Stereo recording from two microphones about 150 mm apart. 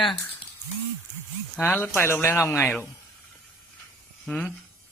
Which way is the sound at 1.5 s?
10° left (ahead or behind).